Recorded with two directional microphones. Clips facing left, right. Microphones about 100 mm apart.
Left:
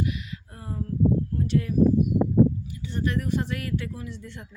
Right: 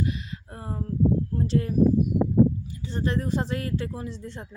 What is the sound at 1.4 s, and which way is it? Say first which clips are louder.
A woman's voice: even; 35° right (ahead or behind).